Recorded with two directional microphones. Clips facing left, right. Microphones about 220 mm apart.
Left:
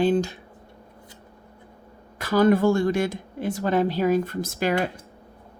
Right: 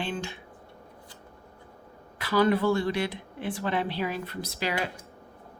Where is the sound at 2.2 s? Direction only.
45° left (ahead or behind).